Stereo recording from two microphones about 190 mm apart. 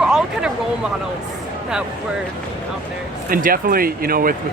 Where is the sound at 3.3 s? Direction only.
50° right (ahead or behind).